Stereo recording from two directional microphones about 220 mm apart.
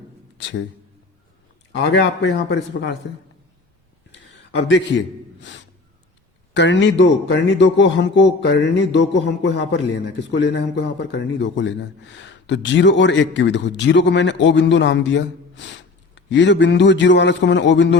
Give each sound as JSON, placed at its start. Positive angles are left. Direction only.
{"t": 0.4, "sound": "a man's voice", "side_deg": 55}
{"t": 1.7, "sound": "a man's voice", "side_deg": 55}
{"t": 4.7, "sound": "a man's voice", "side_deg": 55}